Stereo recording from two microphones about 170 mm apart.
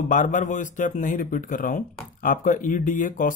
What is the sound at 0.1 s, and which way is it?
Speech, 50° left (ahead or behind).